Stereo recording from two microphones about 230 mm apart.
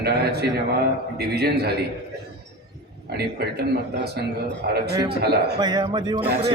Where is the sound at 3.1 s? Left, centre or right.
Right.